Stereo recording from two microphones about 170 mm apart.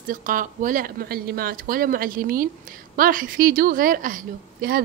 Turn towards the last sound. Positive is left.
turn(degrees=-55)  # may be behind; listen again after turning